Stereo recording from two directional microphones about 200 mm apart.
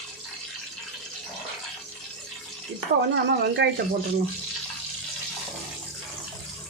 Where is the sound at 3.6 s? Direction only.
60° right (ahead or behind).